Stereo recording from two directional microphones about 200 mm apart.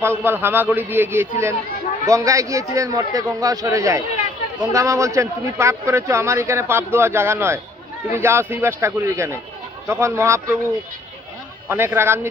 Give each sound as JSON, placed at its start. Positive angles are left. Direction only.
{"t": 0.0, "sound": "a man's voice", "side_deg": -10}
{"t": 11.7, "sound": "a man's voice", "side_deg": -10}